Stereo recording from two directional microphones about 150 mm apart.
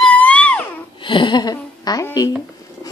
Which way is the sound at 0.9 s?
35° left (ahead or behind).